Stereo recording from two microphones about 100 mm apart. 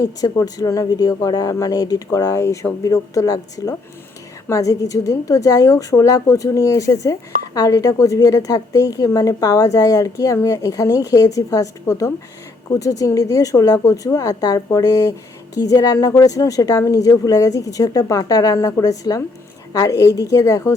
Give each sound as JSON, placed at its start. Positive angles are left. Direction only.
{"t": 0.0, "sound": "a woman's voice", "side_deg": 35}